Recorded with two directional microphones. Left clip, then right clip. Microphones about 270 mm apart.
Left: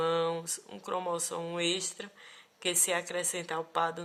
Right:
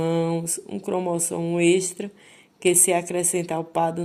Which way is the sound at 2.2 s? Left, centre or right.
Left.